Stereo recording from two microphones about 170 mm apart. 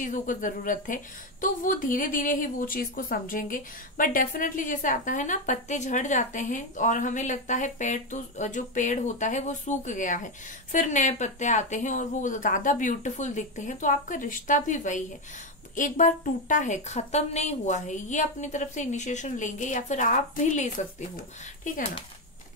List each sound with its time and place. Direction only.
0.0 s a woman's voice: 50° left (ahead or behind)